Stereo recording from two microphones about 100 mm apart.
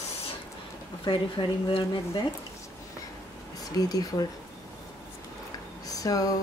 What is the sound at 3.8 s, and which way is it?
Speech, 40° left (ahead or behind).